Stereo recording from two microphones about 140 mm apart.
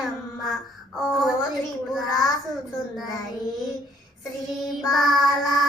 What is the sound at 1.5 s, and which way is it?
Speech, centre (ahead or behind).